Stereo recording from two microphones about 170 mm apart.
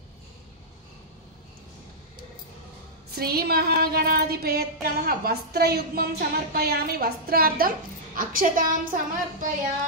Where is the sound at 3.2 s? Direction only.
65° right (ahead or behind).